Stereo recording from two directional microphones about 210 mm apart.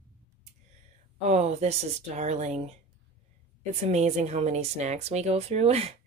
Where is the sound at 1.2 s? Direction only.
30° right (ahead or behind).